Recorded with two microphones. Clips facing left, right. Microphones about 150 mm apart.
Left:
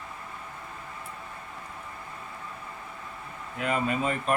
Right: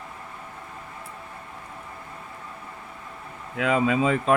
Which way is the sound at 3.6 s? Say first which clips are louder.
Right 6 dB; 90° right.